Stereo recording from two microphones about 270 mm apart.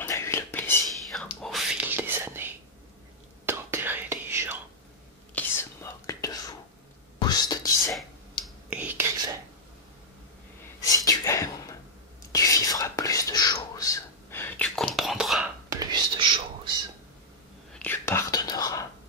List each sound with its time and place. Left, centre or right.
0.0 s whispering: centre
5.3 s whispering: centre
8.7 s whispering: centre
10.8 s a sound: centre
12.3 s whispering: centre
15.7 s whispering: centre
17.7 s whispering: centre